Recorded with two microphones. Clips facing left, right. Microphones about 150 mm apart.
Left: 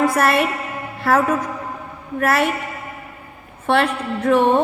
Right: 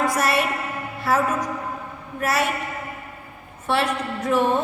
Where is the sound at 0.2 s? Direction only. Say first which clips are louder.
Left 4 dB; 55° left (ahead or behind).